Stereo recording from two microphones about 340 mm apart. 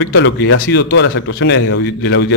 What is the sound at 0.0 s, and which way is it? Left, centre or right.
A man's voice, left.